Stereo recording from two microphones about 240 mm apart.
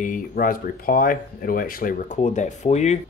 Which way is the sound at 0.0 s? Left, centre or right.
Left.